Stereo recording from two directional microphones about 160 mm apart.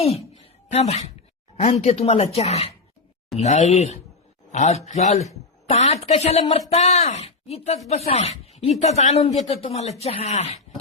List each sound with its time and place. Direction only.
0.7 s speech: 45° left (ahead or behind)